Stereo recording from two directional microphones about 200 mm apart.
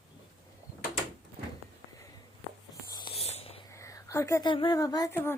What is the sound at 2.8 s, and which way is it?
Whispering, 25° left (ahead or behind).